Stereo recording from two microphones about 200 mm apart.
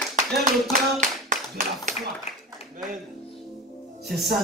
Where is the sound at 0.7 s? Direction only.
40° right (ahead or behind).